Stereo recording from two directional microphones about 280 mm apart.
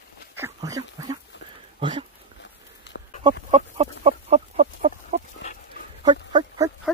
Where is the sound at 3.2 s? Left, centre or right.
Centre.